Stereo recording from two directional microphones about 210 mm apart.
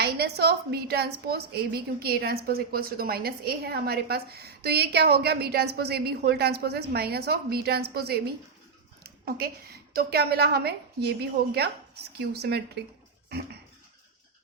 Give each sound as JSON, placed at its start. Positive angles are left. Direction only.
{"t": 0.0, "sound": "a woman's voice", "side_deg": -50}